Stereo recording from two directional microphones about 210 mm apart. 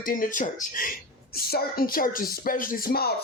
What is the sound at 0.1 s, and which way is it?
Speech, 40° left (ahead or behind).